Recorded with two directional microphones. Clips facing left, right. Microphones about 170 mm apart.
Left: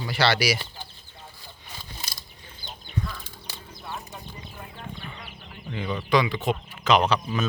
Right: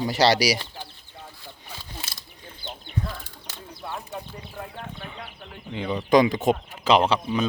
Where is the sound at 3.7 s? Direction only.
65° right (ahead or behind).